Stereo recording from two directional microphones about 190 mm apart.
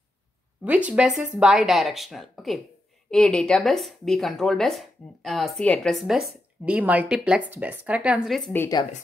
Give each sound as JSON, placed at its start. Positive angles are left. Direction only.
{"t": 0.7, "sound": "speech", "side_deg": -5}
{"t": 8.5, "sound": "speech", "side_deg": 20}